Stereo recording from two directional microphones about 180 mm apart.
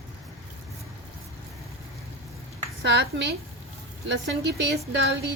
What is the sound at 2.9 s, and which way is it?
Speech, 70° right (ahead or behind).